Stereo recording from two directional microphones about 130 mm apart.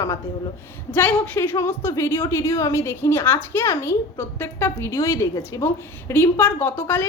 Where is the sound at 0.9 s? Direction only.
15° left (ahead or behind).